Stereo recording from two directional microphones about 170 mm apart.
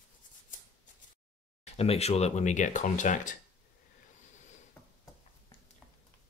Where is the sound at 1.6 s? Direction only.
35° left (ahead or behind).